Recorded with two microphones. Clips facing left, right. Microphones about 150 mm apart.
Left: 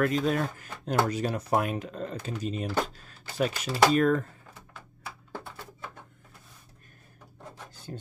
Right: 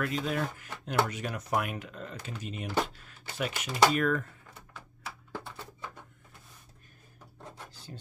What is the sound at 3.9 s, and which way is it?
Speech, 35° left (ahead or behind).